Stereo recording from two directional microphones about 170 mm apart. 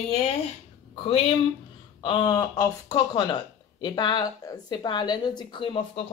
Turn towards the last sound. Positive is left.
turn(degrees=30)  # may be behind; listen again after turning